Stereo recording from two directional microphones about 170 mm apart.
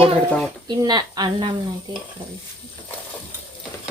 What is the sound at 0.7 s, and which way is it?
Speech, 25° right (ahead or behind).